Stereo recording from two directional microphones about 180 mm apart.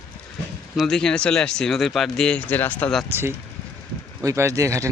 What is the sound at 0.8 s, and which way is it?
Speech, 5° left (ahead or behind).